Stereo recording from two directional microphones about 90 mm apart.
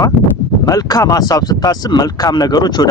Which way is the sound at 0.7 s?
45° left (ahead or behind).